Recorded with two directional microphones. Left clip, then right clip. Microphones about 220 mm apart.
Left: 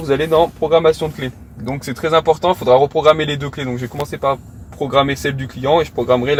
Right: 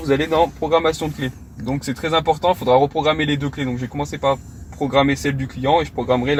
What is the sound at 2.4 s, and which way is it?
Speech, 30° left (ahead or behind).